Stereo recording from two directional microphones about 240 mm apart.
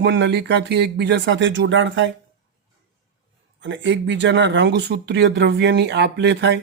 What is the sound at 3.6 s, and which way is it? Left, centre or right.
Speech, right.